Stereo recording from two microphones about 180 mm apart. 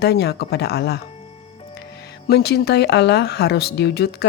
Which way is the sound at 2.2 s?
60° left (ahead or behind).